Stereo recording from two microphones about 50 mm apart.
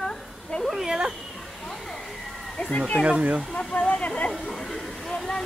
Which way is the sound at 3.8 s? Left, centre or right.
Left.